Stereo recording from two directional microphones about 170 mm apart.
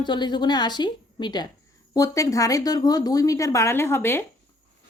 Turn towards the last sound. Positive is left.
turn(degrees=15)  # may be behind; listen again after turning